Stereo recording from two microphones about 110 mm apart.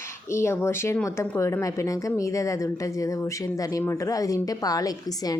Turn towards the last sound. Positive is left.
turn(degrees=35)  # may be behind; listen again after turning